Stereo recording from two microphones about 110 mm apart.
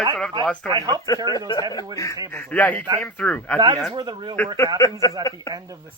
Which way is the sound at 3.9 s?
40° right (ahead or behind).